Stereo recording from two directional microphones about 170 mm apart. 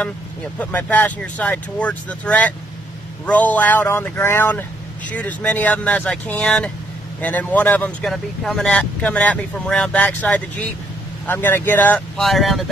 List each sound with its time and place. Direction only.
0.6 s speech: 10° left (ahead or behind)